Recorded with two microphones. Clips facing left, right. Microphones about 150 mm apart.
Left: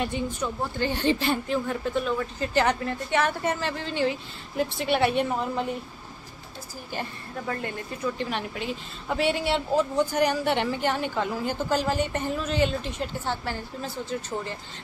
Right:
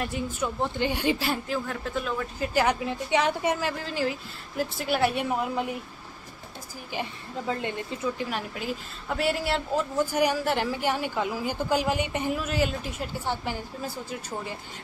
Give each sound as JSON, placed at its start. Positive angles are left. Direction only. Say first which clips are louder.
{"t": 0.0, "sound": "a woman's voice", "louder": "left 1 dB", "side_deg": 0}
{"t": 0.6, "sound": "a woman's voice", "louder": "right 1 dB", "side_deg": -20}
{"t": 6.9, "sound": "a woman's voice", "louder": "right 1 dB", "side_deg": -15}
{"t": 8.2, "sound": "a woman's voice", "louder": "left 1 dB", "side_deg": -5}